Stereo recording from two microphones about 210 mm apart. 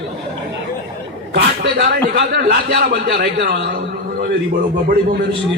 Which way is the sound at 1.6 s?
55° right (ahead or behind).